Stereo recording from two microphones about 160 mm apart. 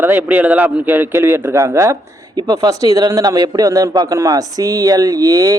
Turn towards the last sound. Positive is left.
turn(degrees=-20)  # may be behind; listen again after turning